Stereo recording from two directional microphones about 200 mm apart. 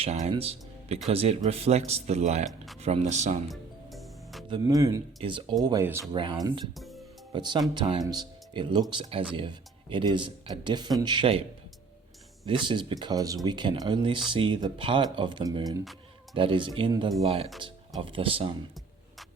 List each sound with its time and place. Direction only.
0.0 s a man's voice: 30° right (ahead or behind)
3.5 s music: centre (ahead or behind)
4.4 s speech: 20° right (ahead or behind)
6.1 s speech: 25° right (ahead or behind)
6.7 s music: centre (ahead or behind)
7.3 s speech: 25° right (ahead or behind)
12.5 s speech: 25° right (ahead or behind)